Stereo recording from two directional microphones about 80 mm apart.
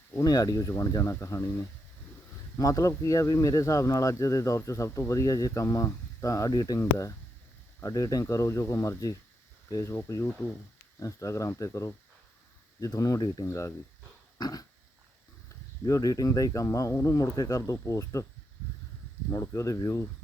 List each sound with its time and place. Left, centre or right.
0.2 s speech: left
1.1 s speech: left
2.6 s speech: left
6.7 s speech: left
11.0 s speech: left
13.4 s speech: left
14.3 s dog: left
15.9 s speech: left
19.3 s speech: left